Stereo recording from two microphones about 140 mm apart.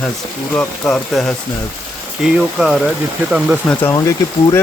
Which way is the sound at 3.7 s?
15° left (ahead or behind).